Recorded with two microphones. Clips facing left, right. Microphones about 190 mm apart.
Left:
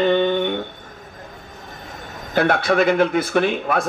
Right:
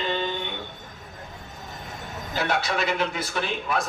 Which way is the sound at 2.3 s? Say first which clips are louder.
Left 9 dB; 55° left (ahead or behind).